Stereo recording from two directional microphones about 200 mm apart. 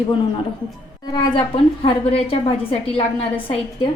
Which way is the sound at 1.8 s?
30° left (ahead or behind).